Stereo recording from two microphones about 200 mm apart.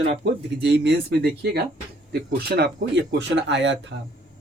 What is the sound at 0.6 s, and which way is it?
Speech, 60° right (ahead or behind).